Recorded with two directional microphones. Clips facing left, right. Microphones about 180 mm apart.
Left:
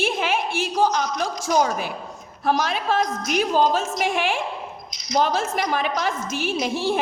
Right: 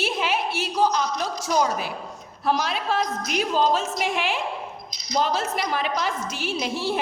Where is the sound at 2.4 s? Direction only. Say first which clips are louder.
Left 2 dB; 50° left (ahead or behind).